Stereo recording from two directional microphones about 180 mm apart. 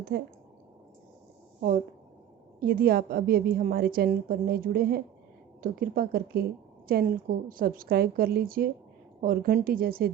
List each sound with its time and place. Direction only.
0.1 s speech: 70° right (ahead or behind)
2.6 s a woman's voice: 55° right (ahead or behind)